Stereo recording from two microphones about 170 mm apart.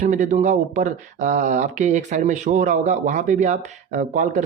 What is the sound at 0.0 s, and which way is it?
Speech, 50° right (ahead or behind).